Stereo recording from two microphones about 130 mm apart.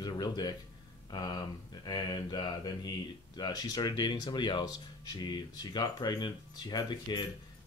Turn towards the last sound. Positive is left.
turn(degrees=35)  # may be behind; listen again after turning